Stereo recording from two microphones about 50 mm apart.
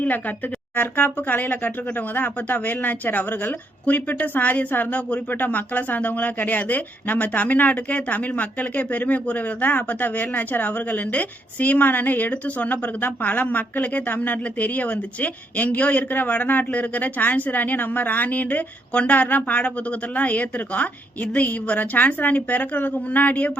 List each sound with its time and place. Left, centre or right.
0.0 s a woman's voice: left